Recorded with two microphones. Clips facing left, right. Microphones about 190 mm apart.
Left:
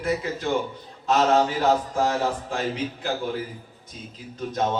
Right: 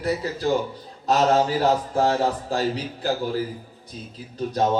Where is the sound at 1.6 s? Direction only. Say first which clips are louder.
Right 1 dB; 35° right (ahead or behind).